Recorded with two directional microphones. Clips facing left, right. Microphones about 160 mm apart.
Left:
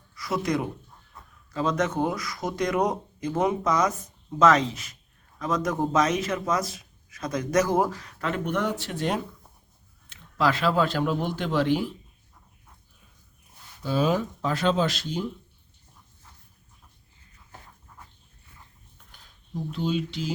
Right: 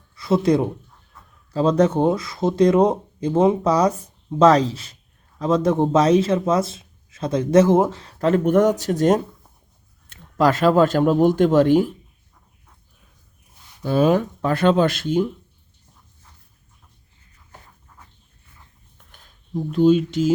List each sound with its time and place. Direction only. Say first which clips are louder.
0.2 s speech: right 9 dB; 30° right (ahead or behind); by 11.9 s 45° right (ahead or behind)
13.8 s speech: right 7 dB; 55° right (ahead or behind)
19.7 s speech: right 13 dB; 45° right (ahead or behind)